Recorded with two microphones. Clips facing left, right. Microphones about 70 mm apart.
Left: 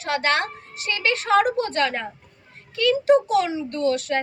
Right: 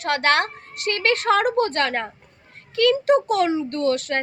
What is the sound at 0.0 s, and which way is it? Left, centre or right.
A woman's voice, right.